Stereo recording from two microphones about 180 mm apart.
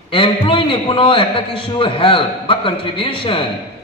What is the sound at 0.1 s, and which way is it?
A man's voice, 30° left (ahead or behind).